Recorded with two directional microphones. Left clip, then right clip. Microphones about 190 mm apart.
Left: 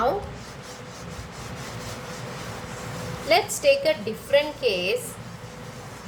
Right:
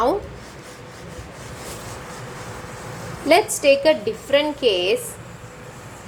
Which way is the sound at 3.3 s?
25° right (ahead or behind).